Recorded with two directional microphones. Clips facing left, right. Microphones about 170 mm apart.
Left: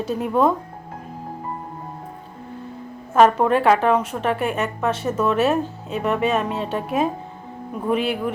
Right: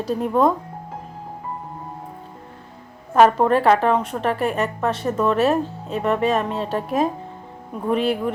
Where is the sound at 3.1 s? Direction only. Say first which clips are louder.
Right 1 dB; centre (ahead or behind).